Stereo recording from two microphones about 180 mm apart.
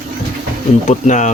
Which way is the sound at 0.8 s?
40° left (ahead or behind).